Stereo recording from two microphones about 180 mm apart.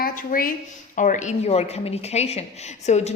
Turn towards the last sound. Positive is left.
turn(degrees=40)  # may be behind; listen again after turning